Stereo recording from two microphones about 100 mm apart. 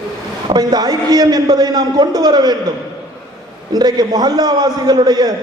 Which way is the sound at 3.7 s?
40° right (ahead or behind).